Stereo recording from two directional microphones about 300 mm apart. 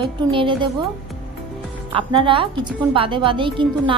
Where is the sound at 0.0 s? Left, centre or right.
Centre.